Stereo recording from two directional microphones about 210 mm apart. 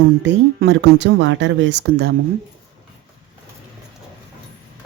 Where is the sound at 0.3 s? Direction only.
55° right (ahead or behind).